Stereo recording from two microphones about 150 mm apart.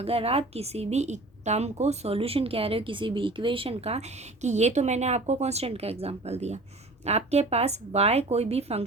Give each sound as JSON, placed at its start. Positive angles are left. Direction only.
{"t": 0.0, "sound": "a woman's voice", "side_deg": -40}